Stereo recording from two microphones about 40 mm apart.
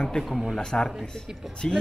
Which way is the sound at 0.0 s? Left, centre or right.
Centre.